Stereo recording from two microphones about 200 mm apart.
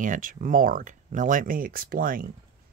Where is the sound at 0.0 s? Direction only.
40° right (ahead or behind).